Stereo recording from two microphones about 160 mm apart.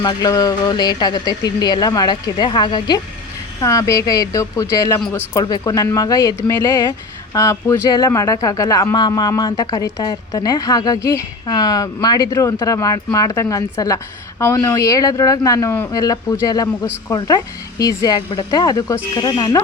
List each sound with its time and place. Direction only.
0.0 s speech: 25° left (ahead or behind)
4.9 s speech: 5° left (ahead or behind)
5.3 s speech: 25° left (ahead or behind)